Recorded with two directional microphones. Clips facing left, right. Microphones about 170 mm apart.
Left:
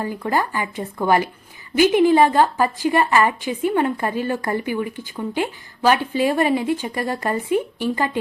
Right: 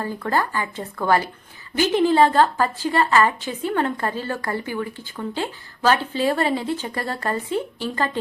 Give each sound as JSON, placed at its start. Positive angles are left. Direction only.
{"t": 0.0, "sound": "a woman's voice", "side_deg": 15}